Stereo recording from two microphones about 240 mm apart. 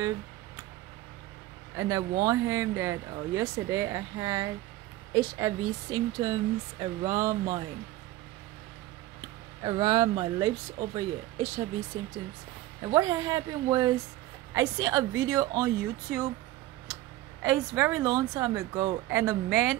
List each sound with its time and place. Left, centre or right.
1.8 s speech: centre
9.6 s speech: centre
12.8 s speech: centre
17.4 s speech: centre